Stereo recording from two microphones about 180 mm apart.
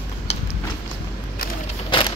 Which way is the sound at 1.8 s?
30° left (ahead or behind).